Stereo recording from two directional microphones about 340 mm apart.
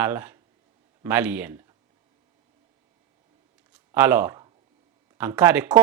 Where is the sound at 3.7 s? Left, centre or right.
Centre.